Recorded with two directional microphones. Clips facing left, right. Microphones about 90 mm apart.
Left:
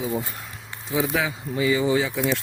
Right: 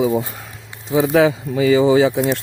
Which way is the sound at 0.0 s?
90° right.